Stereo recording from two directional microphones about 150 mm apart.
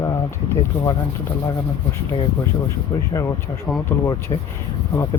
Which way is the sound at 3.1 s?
25° left (ahead or behind).